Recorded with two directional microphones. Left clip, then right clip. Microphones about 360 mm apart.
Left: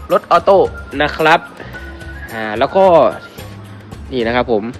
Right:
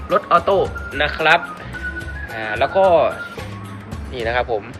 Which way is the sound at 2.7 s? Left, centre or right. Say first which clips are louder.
Left 4 dB; left.